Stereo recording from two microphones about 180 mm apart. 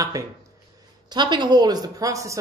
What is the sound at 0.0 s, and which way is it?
Speech, 20° right (ahead or behind).